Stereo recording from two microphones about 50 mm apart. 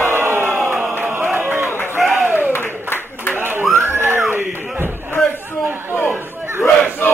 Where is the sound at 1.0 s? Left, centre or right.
Right.